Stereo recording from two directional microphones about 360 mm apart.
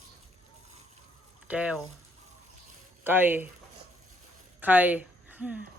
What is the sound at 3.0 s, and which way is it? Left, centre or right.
Speech, centre.